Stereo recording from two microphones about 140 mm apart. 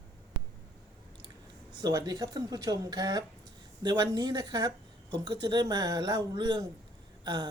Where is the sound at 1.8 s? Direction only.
25° right (ahead or behind).